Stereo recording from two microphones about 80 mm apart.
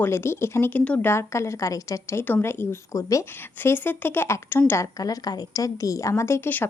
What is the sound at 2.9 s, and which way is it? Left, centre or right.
Speech, left.